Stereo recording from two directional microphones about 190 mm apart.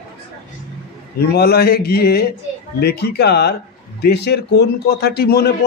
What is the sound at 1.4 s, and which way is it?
A man's voice, 55° left (ahead or behind).